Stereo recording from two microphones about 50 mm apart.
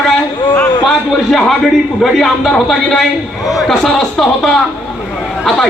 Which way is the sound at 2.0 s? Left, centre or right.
Centre.